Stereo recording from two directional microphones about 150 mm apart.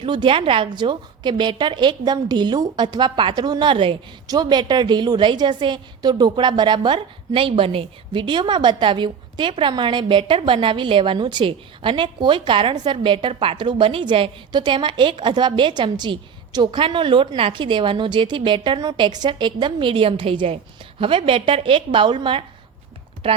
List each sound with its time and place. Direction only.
0.0 s a woman's voice: 35° right (ahead or behind)